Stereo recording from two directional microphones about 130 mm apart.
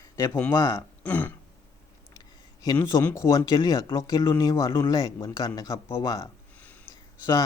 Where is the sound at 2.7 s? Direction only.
20° left (ahead or behind).